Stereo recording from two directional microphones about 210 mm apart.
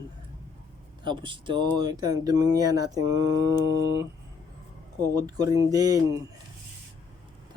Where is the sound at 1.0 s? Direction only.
20° right (ahead or behind).